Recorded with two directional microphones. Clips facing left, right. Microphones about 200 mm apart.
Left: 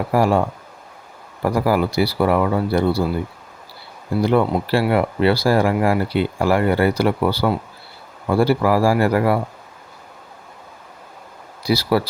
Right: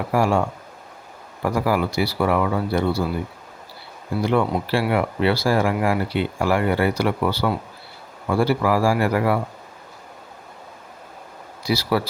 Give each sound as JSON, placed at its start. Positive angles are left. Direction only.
{"t": 0.1, "sound": "speech", "side_deg": 35}
{"t": 4.2, "sound": "speech", "side_deg": 35}
{"t": 11.6, "sound": "speech", "side_deg": 35}